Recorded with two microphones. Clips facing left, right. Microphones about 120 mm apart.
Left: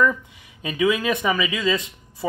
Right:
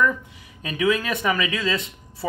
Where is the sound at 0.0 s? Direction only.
5° left (ahead or behind).